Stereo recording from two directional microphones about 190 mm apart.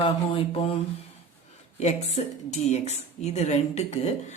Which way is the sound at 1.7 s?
35° left (ahead or behind).